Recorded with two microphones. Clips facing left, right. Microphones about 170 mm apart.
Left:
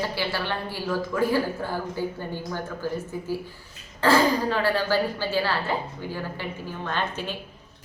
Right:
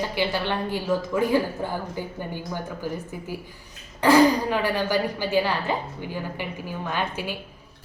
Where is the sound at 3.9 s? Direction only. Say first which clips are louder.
Right 3 dB; 15° right (ahead or behind).